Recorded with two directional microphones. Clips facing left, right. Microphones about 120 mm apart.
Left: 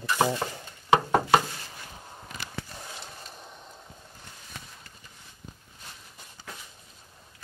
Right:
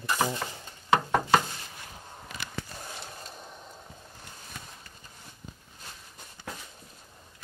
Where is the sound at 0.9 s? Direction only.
15° left (ahead or behind).